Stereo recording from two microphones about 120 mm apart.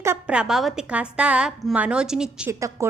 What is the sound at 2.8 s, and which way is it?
Speech, 25° right (ahead or behind).